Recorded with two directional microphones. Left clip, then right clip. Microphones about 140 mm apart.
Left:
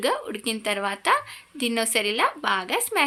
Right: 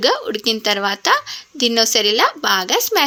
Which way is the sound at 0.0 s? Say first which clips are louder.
Right 8 dB; 35° right (ahead or behind).